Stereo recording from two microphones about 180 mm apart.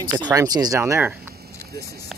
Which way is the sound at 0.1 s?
20° right (ahead or behind).